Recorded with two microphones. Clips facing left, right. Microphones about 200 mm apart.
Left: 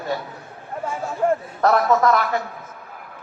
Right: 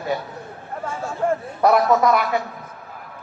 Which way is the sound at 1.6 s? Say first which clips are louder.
Right 1 dB; 10° right (ahead or behind).